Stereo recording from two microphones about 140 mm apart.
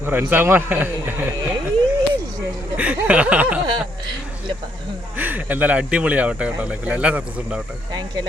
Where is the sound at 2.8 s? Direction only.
10° right (ahead or behind).